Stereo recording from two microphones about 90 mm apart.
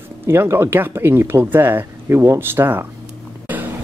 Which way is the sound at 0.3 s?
30° right (ahead or behind).